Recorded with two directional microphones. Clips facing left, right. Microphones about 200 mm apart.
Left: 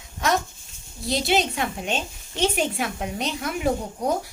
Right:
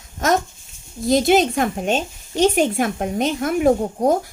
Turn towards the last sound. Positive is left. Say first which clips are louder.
# right 8 dB
turn(degrees=-45)  # may be behind; listen again after turning